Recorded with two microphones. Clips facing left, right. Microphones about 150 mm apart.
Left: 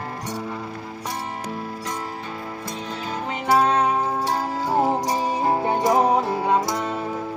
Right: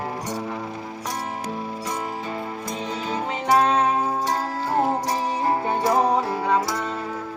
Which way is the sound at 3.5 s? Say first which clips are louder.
Even; 5° left (ahead or behind).